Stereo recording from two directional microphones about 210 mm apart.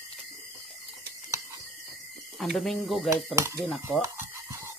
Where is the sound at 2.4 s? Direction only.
Centre (ahead or behind).